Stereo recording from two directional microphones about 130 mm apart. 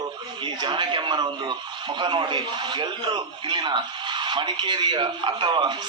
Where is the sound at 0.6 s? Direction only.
35° right (ahead or behind).